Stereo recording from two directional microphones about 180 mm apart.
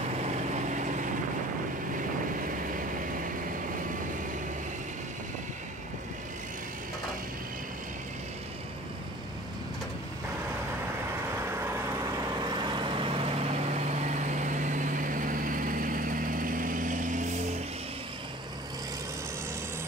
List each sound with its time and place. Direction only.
0.3 s vehicle: 40° right (ahead or behind)
12.6 s vehicle: 25° right (ahead or behind); by 17.6 s 45° right (ahead or behind)